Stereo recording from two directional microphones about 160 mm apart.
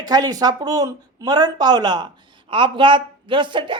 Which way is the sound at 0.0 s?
25° right (ahead or behind).